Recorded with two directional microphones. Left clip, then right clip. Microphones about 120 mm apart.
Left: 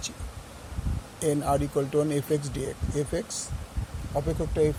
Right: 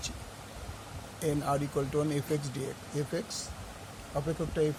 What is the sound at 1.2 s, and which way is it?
Speech, 35° left (ahead or behind).